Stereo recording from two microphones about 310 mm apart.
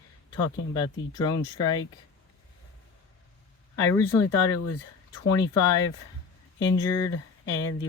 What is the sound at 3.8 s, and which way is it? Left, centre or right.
Speech, centre.